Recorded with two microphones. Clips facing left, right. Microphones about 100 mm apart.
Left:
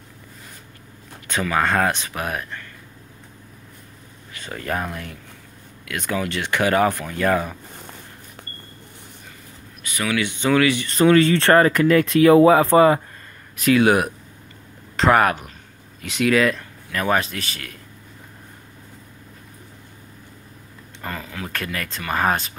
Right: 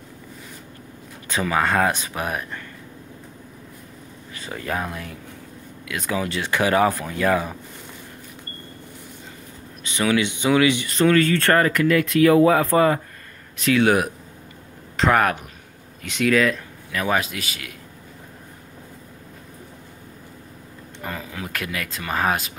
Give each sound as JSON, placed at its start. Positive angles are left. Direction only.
{"t": 1.6, "sound": "speech", "side_deg": -5}
{"t": 2.1, "sound": "speech", "side_deg": -20}
{"t": 4.5, "sound": "a man's voice", "side_deg": -10}
{"t": 9.8, "sound": "speech", "side_deg": -25}
{"t": 11.1, "sound": "speech", "side_deg": 20}
{"t": 13.6, "sound": "a man's voice", "side_deg": 5}
{"t": 21.0, "sound": "a sound", "side_deg": -15}
{"t": 21.5, "sound": "a man's voice", "side_deg": -5}